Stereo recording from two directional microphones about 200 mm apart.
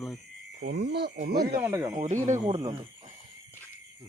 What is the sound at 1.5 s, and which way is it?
Speech, 10° right (ahead or behind).